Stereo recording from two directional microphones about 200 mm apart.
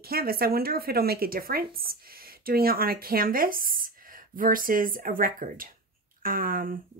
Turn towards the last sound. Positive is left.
turn(degrees=-45)  # may be behind; listen again after turning